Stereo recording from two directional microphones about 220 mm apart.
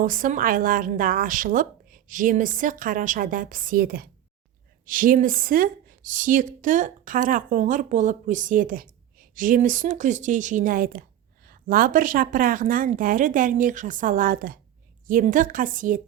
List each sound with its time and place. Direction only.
0.0 s speech: 40° right (ahead or behind)